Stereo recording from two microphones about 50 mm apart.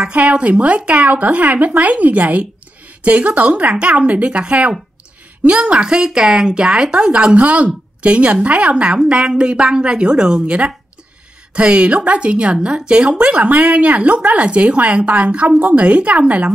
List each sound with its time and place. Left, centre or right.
0.0 s a woman's voice: right